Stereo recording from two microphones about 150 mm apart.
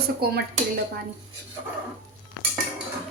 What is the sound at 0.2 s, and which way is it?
Speech, 90° right.